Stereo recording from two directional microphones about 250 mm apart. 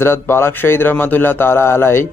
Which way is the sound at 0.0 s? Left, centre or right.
Centre.